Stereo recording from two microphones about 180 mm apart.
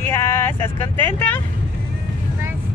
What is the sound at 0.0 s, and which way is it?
Vehicle, 15° left (ahead or behind).